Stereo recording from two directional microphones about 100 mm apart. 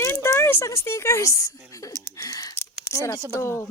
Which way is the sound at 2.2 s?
35° left (ahead or behind).